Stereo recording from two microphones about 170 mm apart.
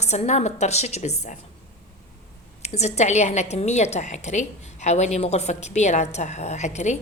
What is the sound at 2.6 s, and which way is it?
A woman's voice, 40° left (ahead or behind).